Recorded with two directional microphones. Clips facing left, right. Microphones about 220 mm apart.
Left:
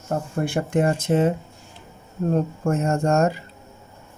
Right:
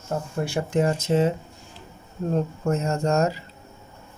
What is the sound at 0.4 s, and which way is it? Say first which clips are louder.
Speech: left 2 dB; 55° left (ahead or behind).